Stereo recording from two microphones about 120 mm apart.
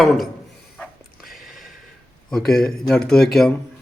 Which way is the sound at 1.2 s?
Centre (ahead or behind).